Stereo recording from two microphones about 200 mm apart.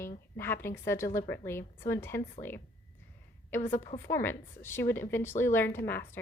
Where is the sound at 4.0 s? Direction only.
10° left (ahead or behind).